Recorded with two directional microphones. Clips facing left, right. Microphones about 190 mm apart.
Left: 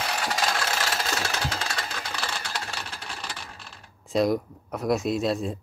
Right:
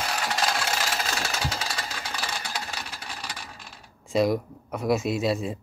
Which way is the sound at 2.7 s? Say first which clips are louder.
Left 1 dB; 10° right (ahead or behind).